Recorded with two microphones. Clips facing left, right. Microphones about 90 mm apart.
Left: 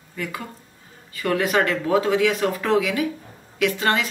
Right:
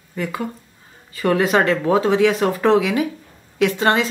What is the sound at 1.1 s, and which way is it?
Speech, 30° right (ahead or behind).